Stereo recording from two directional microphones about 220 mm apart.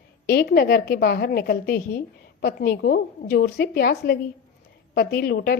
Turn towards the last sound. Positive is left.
turn(degrees=45)  # may be behind; listen again after turning